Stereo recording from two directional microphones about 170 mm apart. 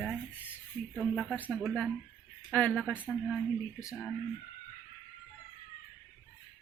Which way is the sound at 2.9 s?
10° right (ahead or behind).